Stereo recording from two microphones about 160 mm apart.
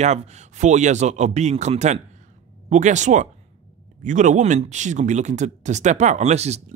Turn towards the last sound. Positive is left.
turn(degrees=-45)  # may be behind; listen again after turning